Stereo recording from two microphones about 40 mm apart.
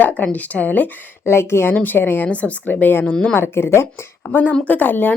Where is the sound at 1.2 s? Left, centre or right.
Left.